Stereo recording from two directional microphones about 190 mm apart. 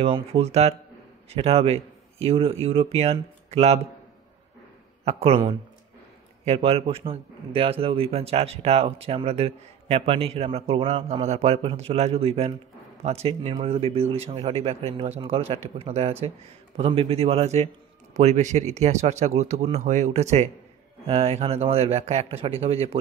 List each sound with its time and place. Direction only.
0.0 s a man's voice: 30° right (ahead or behind)
5.0 s a man's voice: 30° right (ahead or behind)
6.4 s a man's voice: 30° right (ahead or behind)